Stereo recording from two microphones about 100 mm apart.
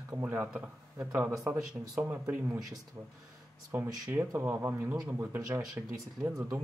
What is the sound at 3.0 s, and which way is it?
Speech, 35° right (ahead or behind).